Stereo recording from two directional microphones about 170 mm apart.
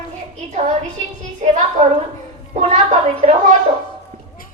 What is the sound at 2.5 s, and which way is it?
A woman's voice, 40° right (ahead or behind).